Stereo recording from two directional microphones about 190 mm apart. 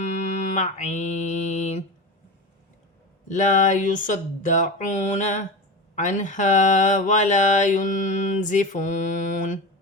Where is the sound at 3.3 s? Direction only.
40° left (ahead or behind).